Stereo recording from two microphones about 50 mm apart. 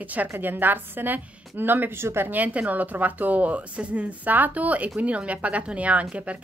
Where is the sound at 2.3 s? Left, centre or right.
Right.